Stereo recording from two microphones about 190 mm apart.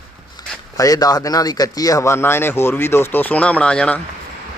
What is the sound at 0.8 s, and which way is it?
A man's voice, 20° left (ahead or behind).